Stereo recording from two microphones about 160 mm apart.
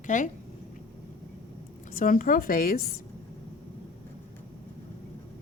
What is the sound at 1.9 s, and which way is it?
Speech, 60° left (ahead or behind).